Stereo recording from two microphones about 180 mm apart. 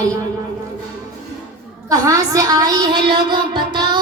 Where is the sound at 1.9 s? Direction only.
20° right (ahead or behind).